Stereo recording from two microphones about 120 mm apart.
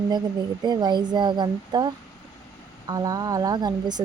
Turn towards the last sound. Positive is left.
turn(degrees=-35)  # may be behind; listen again after turning